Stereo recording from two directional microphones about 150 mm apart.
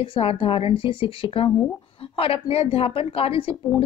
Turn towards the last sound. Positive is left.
turn(degrees=35)  # may be behind; listen again after turning